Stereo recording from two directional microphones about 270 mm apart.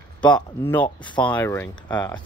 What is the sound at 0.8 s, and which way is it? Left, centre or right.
Speech, centre.